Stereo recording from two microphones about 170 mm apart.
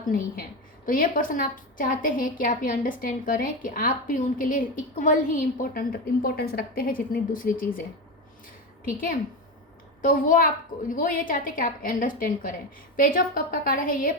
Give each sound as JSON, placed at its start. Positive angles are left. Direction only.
{"t": 0.9, "sound": "a woman's voice", "side_deg": 55}
{"t": 8.8, "sound": "a woman's voice", "side_deg": 55}